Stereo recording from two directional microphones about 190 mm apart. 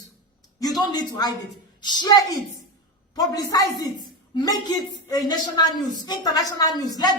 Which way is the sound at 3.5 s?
20° left (ahead or behind).